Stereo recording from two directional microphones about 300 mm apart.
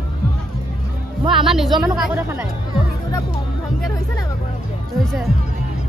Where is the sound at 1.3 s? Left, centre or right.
Centre.